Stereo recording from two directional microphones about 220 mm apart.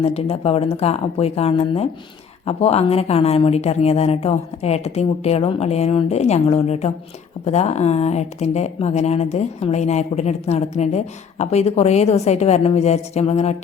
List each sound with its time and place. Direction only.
0.0 s speech: 25° left (ahead or behind)